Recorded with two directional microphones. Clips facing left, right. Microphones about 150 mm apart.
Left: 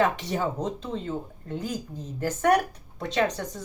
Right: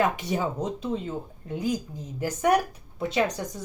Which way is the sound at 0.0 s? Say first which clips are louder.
Even; 10° right (ahead or behind).